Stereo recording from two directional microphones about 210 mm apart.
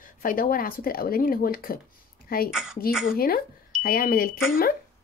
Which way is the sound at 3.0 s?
45° left (ahead or behind).